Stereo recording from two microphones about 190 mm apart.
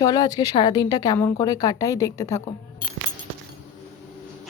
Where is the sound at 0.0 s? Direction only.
20° left (ahead or behind).